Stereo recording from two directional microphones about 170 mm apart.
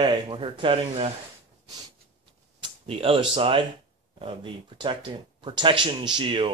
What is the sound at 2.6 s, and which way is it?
Speech, 35° right (ahead or behind).